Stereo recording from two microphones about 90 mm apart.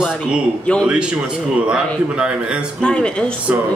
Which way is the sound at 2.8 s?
10° left (ahead or behind).